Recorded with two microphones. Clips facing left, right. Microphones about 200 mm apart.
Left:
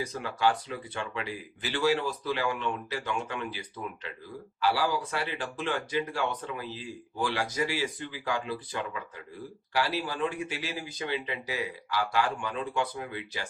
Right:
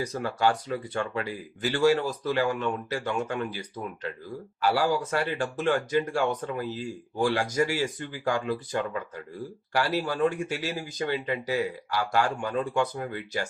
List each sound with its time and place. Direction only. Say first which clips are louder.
0.0 s speech: right 2 dB; 45° right (ahead or behind)